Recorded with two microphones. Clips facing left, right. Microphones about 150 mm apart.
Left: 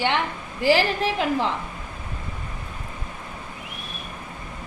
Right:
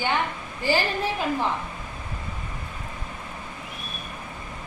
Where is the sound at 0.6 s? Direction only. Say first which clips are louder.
Left 5 dB; 90° left.